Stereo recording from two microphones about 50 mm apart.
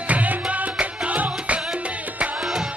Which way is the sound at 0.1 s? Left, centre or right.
Right.